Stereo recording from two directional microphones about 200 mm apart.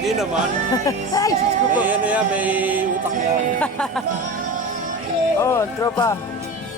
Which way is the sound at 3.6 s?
5° left (ahead or behind).